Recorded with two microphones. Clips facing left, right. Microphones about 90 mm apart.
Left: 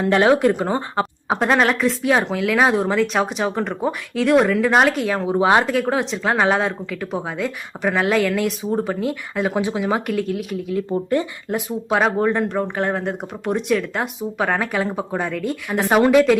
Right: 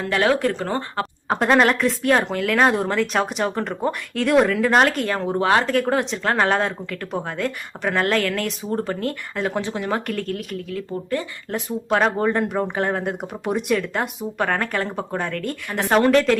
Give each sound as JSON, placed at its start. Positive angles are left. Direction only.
{"t": 0.0, "sound": "speech", "side_deg": 20}
{"t": 1.3, "sound": "speech", "side_deg": 0}
{"t": 10.8, "sound": "speech", "side_deg": 20}
{"t": 11.5, "sound": "speech", "side_deg": 5}